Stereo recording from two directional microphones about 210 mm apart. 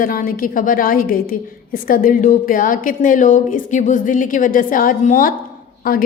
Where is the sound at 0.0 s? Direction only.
40° left (ahead or behind).